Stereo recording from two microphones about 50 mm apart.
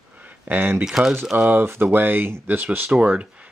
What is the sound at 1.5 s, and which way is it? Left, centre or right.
Speech, right.